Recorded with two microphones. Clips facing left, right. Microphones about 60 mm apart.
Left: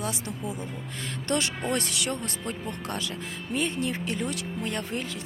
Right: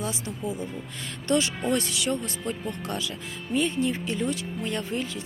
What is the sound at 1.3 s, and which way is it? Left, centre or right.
Speech, left.